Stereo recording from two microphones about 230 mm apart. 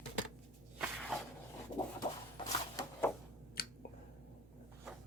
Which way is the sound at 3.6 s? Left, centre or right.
Left.